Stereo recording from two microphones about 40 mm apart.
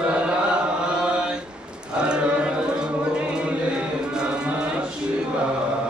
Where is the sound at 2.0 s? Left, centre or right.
Right.